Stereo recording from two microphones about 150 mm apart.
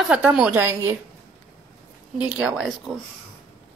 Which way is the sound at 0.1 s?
5° right (ahead or behind).